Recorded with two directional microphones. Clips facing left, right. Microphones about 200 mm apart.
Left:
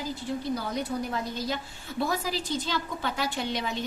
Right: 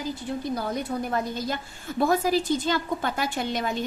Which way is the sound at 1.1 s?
50° right (ahead or behind).